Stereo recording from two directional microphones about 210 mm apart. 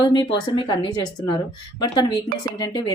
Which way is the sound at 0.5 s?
20° left (ahead or behind).